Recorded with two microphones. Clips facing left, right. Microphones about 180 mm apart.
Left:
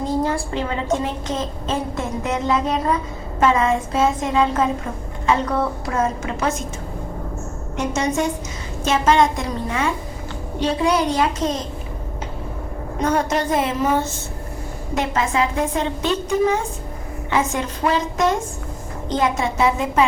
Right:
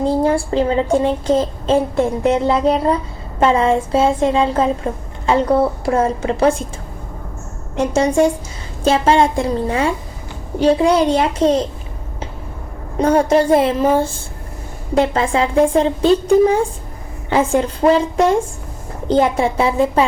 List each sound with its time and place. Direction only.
0.0 s a woman's voice: 30° right (ahead or behind)
7.8 s a woman's voice: 30° right (ahead or behind)
13.0 s a woman's voice: 30° right (ahead or behind)